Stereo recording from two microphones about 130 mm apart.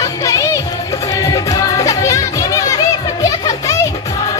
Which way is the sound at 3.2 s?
25° left (ahead or behind).